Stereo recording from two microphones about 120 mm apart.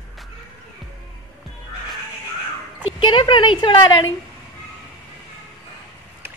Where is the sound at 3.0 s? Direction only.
40° left (ahead or behind).